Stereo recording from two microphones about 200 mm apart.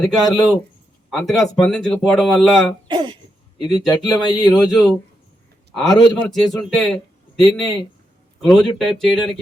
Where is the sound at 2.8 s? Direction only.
25° right (ahead or behind).